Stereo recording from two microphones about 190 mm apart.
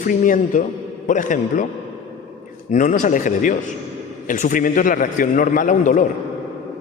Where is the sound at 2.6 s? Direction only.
45° left (ahead or behind).